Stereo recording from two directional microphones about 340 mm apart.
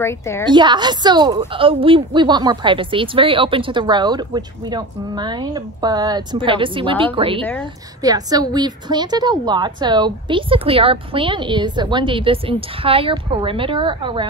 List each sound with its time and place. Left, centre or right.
0.0 s a woman's voice: centre
0.5 s a woman's voice: centre